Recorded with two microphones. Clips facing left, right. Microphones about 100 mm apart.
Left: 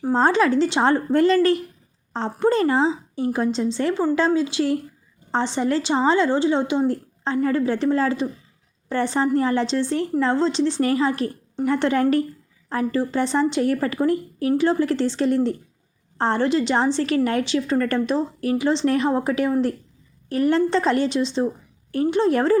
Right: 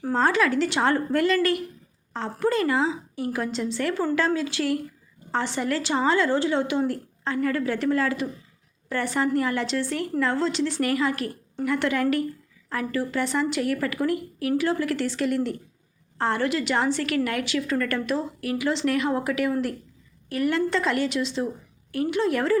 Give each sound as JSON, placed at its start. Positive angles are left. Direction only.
{"t": 0.0, "sound": "a woman's voice", "side_deg": 25}